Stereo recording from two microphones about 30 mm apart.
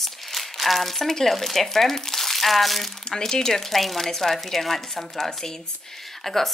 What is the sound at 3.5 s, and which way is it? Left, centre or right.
Speech, centre.